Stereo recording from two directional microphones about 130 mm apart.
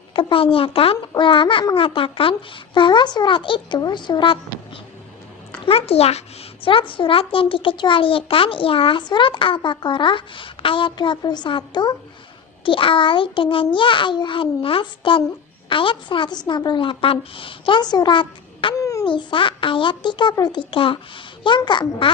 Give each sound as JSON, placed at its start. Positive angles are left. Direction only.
{"t": 0.1, "sound": "a woman's voice", "side_deg": 40}
{"t": 5.6, "sound": "a woman's voice", "side_deg": 50}
{"t": 18.8, "sound": "a sound", "side_deg": 25}
{"t": 19.0, "sound": "a woman's voice", "side_deg": 40}